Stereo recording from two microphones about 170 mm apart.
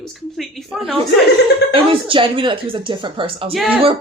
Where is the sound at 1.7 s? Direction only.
30° right (ahead or behind).